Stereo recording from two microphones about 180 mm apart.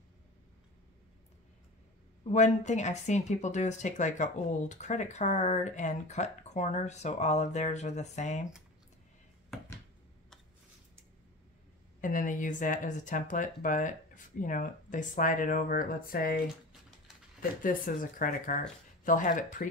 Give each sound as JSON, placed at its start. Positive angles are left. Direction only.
{"t": 2.3, "sound": "speech", "side_deg": 40}
{"t": 12.0, "sound": "speech", "side_deg": 45}
{"t": 17.4, "sound": "speech", "side_deg": 50}